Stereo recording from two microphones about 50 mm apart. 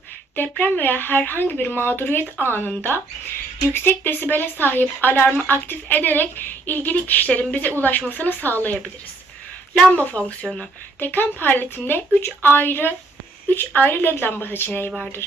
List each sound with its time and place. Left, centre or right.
0.6 s speech: left
9.9 s speech: left
11.0 s speech: left
14.7 s speech: left